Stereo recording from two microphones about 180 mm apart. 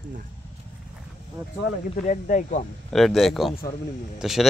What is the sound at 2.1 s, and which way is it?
Speech, 45° left (ahead or behind).